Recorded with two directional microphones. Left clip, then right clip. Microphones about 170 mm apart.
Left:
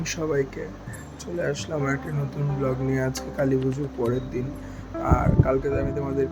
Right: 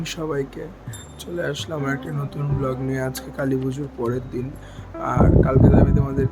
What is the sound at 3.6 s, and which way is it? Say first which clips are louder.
Speech: even; centre (ahead or behind).